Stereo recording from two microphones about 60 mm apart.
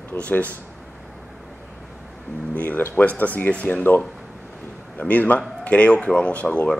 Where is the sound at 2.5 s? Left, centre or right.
Left.